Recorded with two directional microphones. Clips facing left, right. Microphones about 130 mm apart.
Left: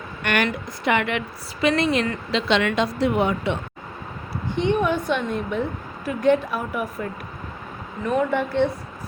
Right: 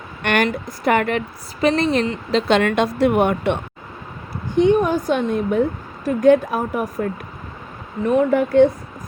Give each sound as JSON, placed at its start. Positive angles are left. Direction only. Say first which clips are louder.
{"t": 0.2, "sound": "a woman's voice", "louder": "right 4 dB", "side_deg": -50}
{"t": 4.5, "sound": "a woman's voice", "louder": "right 6 dB", "side_deg": -45}